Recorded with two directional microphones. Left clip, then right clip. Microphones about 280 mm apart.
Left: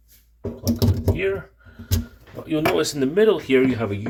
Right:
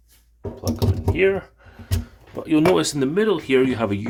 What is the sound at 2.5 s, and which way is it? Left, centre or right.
Speech, right.